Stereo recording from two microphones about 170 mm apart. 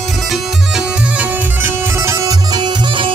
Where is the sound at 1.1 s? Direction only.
15° right (ahead or behind).